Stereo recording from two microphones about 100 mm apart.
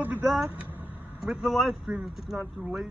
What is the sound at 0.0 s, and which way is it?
Vehicle, 15° right (ahead or behind).